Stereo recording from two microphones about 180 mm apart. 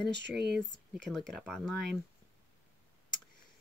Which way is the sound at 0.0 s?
70° right (ahead or behind).